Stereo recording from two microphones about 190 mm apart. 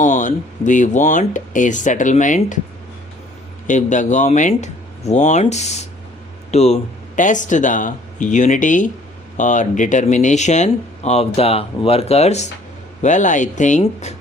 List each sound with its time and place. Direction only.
0.0 s speech: 40° left (ahead or behind)
3.7 s speech: 40° left (ahead or behind)